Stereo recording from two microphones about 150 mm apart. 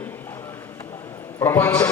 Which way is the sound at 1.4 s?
15° left (ahead or behind).